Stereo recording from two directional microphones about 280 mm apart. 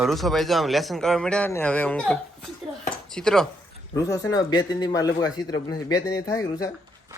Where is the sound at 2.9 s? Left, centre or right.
Centre.